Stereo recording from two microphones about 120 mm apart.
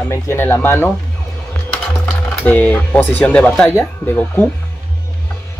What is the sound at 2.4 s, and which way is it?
Speech, 15° left (ahead or behind).